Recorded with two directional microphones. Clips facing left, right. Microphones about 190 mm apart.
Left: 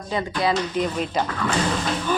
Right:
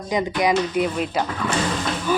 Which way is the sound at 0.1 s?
15° right (ahead or behind).